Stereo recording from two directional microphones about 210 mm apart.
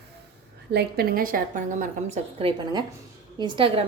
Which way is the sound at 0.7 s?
45° right (ahead or behind).